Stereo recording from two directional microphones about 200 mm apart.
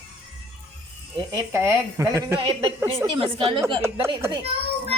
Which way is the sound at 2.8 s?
25° right (ahead or behind).